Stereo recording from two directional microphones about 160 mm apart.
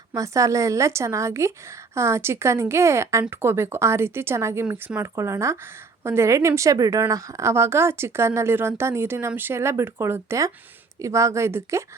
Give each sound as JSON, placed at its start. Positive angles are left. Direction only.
{"t": 0.1, "sound": "a woman's voice", "side_deg": -20}